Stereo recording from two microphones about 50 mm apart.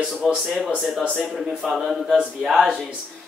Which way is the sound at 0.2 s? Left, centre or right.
Centre.